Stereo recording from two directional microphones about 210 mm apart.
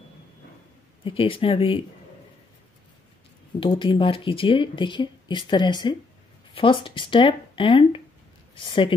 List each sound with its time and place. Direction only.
1.0 s speech: 25° left (ahead or behind)
3.5 s speech: 25° left (ahead or behind)